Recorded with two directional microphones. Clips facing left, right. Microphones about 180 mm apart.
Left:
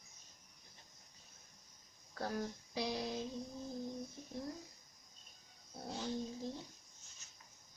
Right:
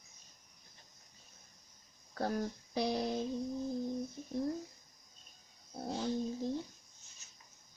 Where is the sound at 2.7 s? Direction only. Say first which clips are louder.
Right 6 dB; 50° right (ahead or behind).